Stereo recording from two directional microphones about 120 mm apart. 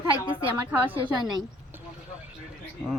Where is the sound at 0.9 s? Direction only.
40° right (ahead or behind).